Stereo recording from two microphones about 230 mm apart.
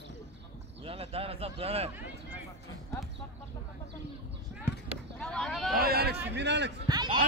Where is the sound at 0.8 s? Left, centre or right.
Right.